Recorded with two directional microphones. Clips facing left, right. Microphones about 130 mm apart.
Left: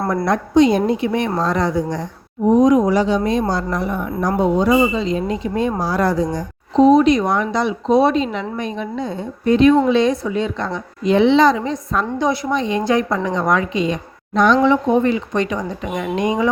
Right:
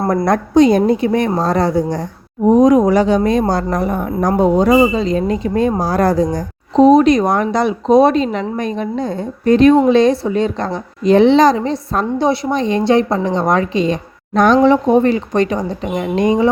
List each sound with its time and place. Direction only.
0.3 s a woman's voice: 40° right (ahead or behind)
2.6 s a woman's voice: 50° right (ahead or behind)
14.3 s a woman's voice: 45° right (ahead or behind)